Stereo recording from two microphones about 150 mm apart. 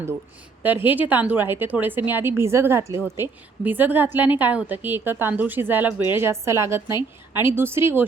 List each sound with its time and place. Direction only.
0.6 s a woman's voice: 10° right (ahead or behind)